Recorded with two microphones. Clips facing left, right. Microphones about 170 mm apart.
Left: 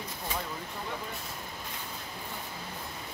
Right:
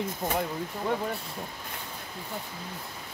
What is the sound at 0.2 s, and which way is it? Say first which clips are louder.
Speech: right 7 dB; 45° right (ahead or behind).